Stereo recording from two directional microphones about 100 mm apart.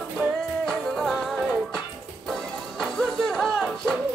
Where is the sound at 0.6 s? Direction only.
Centre (ahead or behind).